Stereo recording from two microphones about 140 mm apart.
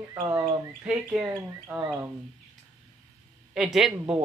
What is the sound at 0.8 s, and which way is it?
Speech, 5° right (ahead or behind).